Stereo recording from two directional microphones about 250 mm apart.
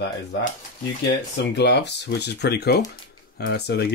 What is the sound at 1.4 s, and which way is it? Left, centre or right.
Speech, left.